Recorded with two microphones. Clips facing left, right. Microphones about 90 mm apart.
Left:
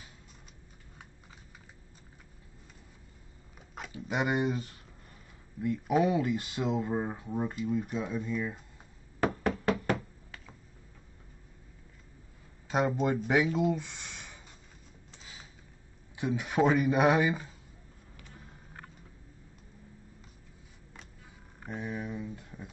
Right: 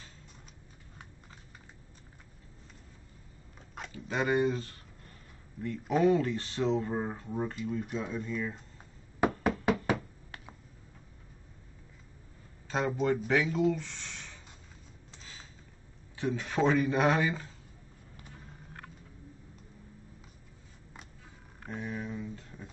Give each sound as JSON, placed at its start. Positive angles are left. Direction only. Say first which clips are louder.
{"t": 3.9, "sound": "speech", "louder": "right 1 dB", "side_deg": 15}
{"t": 9.4, "sound": "knock", "louder": "right 1 dB", "side_deg": -5}
{"t": 12.6, "sound": "a sound", "louder": "left 3 dB", "side_deg": 15}
{"t": 13.0, "sound": "speech", "louder": "left 1 dB", "side_deg": 15}
{"t": 16.2, "sound": "speech", "louder": "left 2 dB", "side_deg": 15}
{"t": 21.6, "sound": "a sound", "louder": "left 1 dB", "side_deg": 10}